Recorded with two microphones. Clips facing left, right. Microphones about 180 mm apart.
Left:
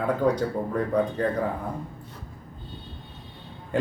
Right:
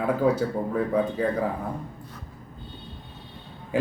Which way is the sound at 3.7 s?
5° right (ahead or behind).